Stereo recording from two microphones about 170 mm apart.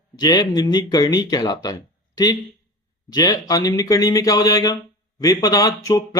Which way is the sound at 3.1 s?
20° left (ahead or behind).